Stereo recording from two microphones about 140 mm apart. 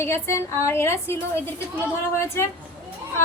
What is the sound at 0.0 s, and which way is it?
A woman's voice, 20° left (ahead or behind).